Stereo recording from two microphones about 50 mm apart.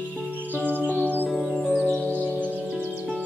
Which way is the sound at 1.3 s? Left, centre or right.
Centre.